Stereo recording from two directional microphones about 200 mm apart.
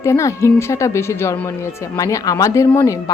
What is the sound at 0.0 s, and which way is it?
Speech, 15° left (ahead or behind).